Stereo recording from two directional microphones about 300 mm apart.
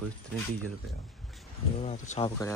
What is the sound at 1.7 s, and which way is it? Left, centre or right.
Speech, left.